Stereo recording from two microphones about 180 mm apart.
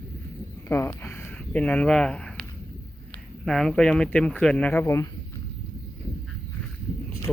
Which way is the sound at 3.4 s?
Centre (ahead or behind).